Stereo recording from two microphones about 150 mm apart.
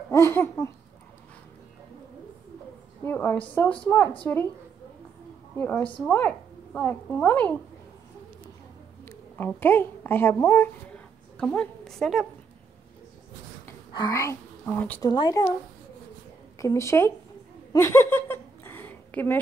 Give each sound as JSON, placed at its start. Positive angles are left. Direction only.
{"t": 0.1, "sound": "babbling", "side_deg": 15}
{"t": 3.1, "sound": "a woman's voice", "side_deg": 15}
{"t": 5.6, "sound": "a woman's voice", "side_deg": 10}
{"t": 9.0, "sound": "a sound", "side_deg": 15}
{"t": 9.5, "sound": "a woman's voice", "side_deg": 15}
{"t": 11.3, "sound": "a woman's voice", "side_deg": 5}
{"t": 13.9, "sound": "speech", "side_deg": 25}
{"t": 15.0, "sound": "speech", "side_deg": 25}
{"t": 16.5, "sound": "speech", "side_deg": 20}
{"t": 17.7, "sound": "a sound", "side_deg": 20}